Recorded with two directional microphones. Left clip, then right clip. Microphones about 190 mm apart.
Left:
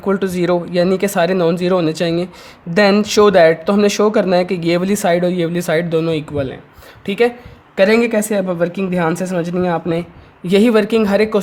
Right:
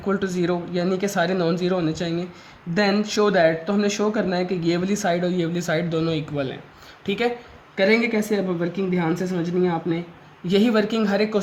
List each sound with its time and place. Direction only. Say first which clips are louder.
0.0 s speech: left 7 dB; 40° left (ahead or behind)
7.8 s speech: left 7 dB; 55° left (ahead or behind)
10.4 s speech: left 7 dB; 40° left (ahead or behind)